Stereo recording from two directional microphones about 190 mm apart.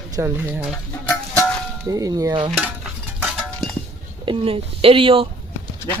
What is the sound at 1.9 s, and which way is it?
Speech, 20° right (ahead or behind).